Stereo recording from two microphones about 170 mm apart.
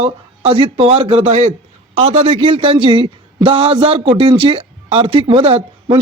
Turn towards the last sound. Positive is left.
turn(degrees=-35)  # may be behind; listen again after turning